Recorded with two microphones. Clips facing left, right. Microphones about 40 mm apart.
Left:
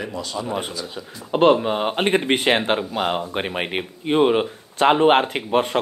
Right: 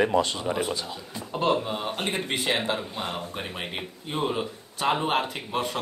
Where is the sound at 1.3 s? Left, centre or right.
Left.